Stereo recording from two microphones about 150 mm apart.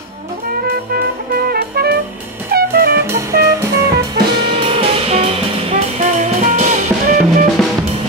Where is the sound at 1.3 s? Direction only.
90° right.